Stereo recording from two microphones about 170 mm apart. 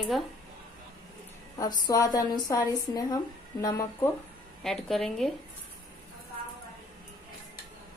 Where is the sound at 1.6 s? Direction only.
20° left (ahead or behind).